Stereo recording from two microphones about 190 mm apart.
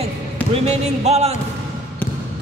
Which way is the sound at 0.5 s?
35° right (ahead or behind).